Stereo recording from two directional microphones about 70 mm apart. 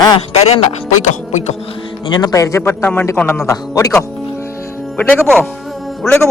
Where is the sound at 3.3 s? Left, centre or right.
Left.